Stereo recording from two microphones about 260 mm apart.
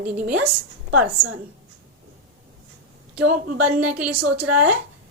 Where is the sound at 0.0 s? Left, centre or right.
Right.